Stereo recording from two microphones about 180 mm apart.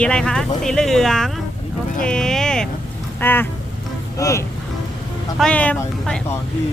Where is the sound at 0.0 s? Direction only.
5° left (ahead or behind).